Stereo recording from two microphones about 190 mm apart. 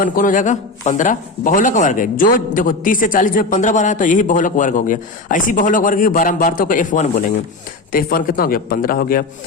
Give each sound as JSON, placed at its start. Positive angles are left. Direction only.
{"t": 0.0, "sound": "a man's voice", "side_deg": 45}